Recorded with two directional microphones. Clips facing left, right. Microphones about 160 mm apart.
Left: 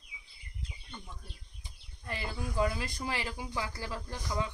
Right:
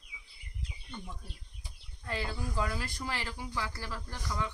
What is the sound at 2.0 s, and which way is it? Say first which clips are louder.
Speech: right 1 dB; 15° left (ahead or behind).